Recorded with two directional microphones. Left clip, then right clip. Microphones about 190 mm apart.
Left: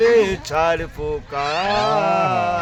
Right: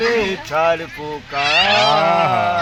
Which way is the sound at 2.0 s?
5° left (ahead or behind).